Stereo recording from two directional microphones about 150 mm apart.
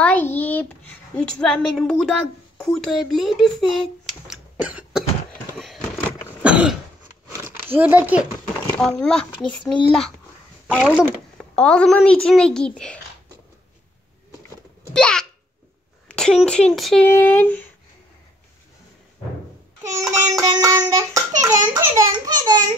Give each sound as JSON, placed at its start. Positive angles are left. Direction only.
{"t": 0.0, "sound": "a child's voice", "side_deg": 10}
{"t": 4.3, "sound": "cough", "side_deg": -10}
{"t": 5.6, "sound": "a sound", "side_deg": 5}
{"t": 6.4, "sound": "cough", "side_deg": -5}
{"t": 7.4, "sound": "a child's voice", "side_deg": -15}
{"t": 8.7, "sound": "a child's voice", "side_deg": 5}
{"t": 15.0, "sound": "babbling", "side_deg": 5}
{"t": 16.1, "sound": "speech", "side_deg": 5}
{"t": 17.0, "sound": "a child's voice", "side_deg": 15}
{"t": 19.9, "sound": "a sound", "side_deg": -20}